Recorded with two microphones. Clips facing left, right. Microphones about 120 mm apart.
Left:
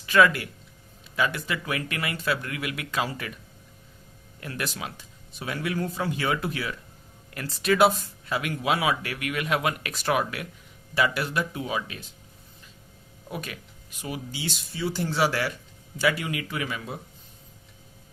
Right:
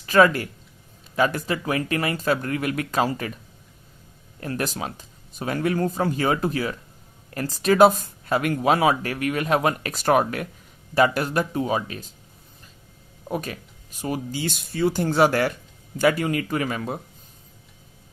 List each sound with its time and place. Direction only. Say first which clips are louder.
0.0 s speech: right 3 dB; 40° right (ahead or behind)
4.4 s speech: right 6 dB; 40° right (ahead or behind)
13.2 s speech: right 7 dB; 40° right (ahead or behind)